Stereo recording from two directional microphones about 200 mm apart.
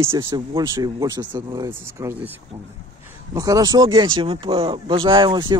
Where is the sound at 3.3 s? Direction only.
15° right (ahead or behind).